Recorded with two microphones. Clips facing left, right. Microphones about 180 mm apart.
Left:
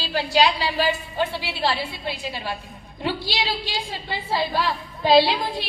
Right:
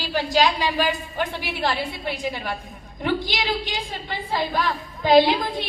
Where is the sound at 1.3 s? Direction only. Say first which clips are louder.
Even; 15° right (ahead or behind).